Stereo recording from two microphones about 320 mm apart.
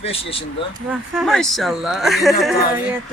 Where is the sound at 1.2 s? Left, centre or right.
Centre.